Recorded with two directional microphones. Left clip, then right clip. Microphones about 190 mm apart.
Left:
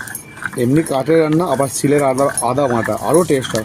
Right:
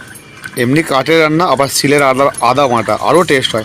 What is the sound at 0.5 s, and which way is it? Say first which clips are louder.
Speech: right 3 dB; 10° left (ahead or behind).